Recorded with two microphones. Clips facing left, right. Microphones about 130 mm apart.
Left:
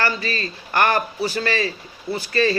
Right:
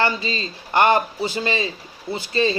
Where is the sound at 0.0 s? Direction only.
20° right (ahead or behind).